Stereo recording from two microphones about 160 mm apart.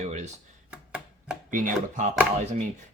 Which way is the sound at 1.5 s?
55° right (ahead or behind).